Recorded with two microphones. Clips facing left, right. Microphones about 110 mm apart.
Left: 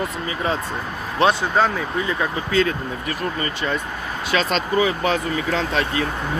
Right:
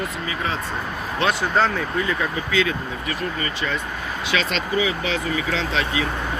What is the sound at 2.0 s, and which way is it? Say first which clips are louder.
Speech: left 1 dB; 25° left (ahead or behind).